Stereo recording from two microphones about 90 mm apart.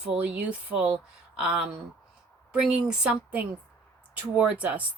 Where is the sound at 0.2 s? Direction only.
15° right (ahead or behind).